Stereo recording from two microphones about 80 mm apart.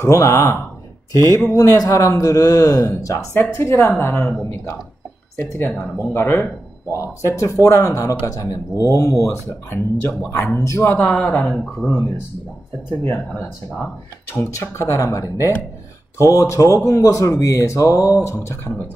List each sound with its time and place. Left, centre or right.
0.0 s speech: left
3.5 s speech: left
11.4 s speech: centre
13.0 s speech: left